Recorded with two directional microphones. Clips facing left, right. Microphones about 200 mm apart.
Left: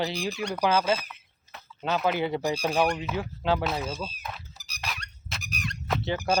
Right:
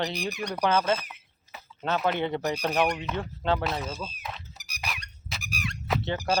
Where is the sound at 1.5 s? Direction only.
5° right (ahead or behind).